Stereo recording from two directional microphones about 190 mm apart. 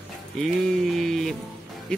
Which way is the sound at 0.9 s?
Centre (ahead or behind).